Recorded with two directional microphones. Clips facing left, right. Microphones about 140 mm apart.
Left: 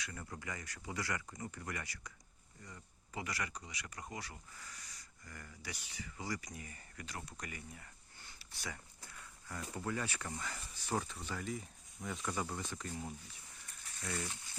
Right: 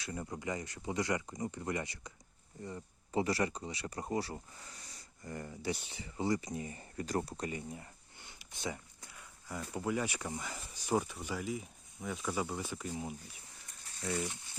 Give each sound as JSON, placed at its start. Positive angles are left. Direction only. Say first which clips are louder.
{"t": 0.0, "sound": "speech", "louder": "right 7 dB", "side_deg": -20}
{"t": 7.0, "sound": "speech", "louder": "right 12 dB", "side_deg": -40}